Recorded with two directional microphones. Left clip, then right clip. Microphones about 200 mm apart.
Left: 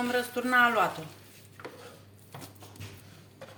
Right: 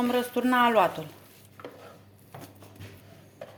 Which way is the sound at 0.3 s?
40° right (ahead or behind).